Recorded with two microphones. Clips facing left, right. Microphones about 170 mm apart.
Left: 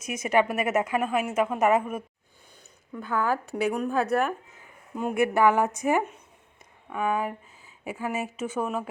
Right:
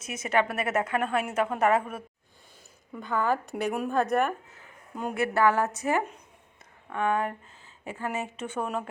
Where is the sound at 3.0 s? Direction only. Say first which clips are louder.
Even; 5° left (ahead or behind).